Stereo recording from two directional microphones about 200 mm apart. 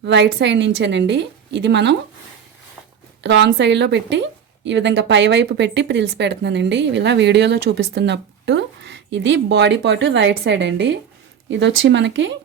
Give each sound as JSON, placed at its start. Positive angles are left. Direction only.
{"t": 0.0, "sound": "speech", "side_deg": -60}
{"t": 3.2, "sound": "speech", "side_deg": -60}